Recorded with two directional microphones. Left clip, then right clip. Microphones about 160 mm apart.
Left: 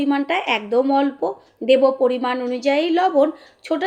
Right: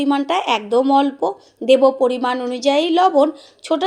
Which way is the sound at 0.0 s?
30° right (ahead or behind).